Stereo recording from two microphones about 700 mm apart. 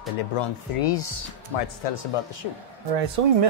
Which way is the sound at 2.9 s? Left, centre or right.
Right.